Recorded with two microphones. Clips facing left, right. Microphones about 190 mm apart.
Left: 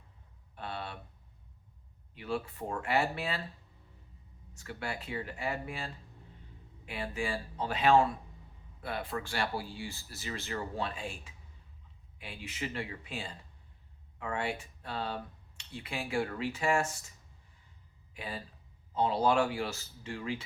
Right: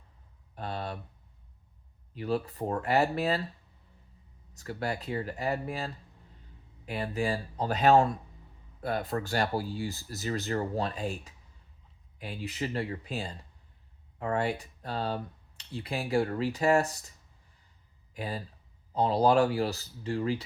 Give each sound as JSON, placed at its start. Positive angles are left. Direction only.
{"t": 0.5, "sound": "a sound", "side_deg": -40}
{"t": 2.1, "sound": "speech", "side_deg": -35}
{"t": 4.5, "sound": "speech", "side_deg": -40}
{"t": 18.1, "sound": "speech", "side_deg": -40}